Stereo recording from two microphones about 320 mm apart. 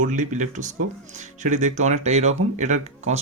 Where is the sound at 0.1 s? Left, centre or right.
Right.